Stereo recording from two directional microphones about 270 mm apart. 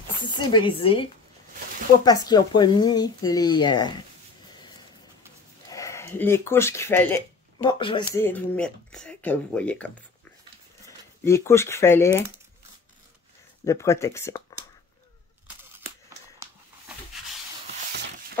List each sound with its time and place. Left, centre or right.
0.2 s speech: centre
2.0 s speech: centre
5.7 s speech: centre
11.2 s speech: centre
13.7 s speech: centre
15.4 s scissors: centre